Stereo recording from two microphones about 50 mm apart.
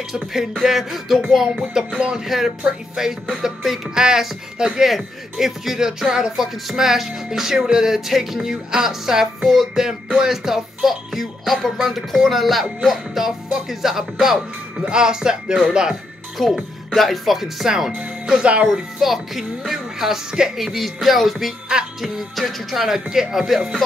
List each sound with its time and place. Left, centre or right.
0.1 s music: centre
1.6 s speech: centre
16.3 s music: centre
17.9 s speech: centre
18.9 s speech: centre
20.5 s music: centre